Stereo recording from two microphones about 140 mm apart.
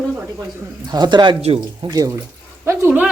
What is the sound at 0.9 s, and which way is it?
Speech, 30° right (ahead or behind).